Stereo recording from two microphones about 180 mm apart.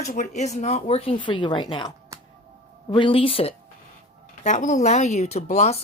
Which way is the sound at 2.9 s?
30° left (ahead or behind).